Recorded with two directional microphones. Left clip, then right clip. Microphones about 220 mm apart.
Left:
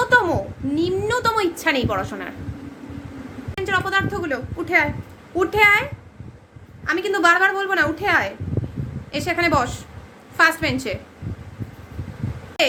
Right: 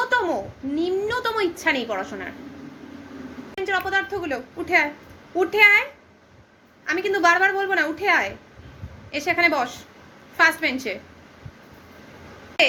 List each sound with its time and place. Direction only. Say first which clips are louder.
0.1 s a sound: left 5 dB; 20° left (ahead or behind)
0.8 s a woman's voice: left 2 dB; 20° left (ahead or behind)
3.5 s a woman's voice: left 2 dB; 20° left (ahead or behind)
6.8 s a woman's voice: left 2 dB; 15° left (ahead or behind)